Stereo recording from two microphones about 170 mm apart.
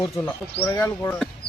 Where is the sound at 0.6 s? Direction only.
15° left (ahead or behind).